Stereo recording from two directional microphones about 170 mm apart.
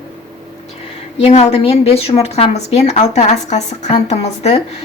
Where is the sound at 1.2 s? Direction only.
40° left (ahead or behind).